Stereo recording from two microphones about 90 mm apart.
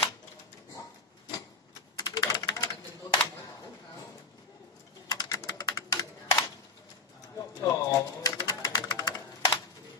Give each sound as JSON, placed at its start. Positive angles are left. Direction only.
{"t": 2.0, "sound": "typing", "side_deg": 45}
{"t": 5.1, "sound": "typing", "side_deg": 45}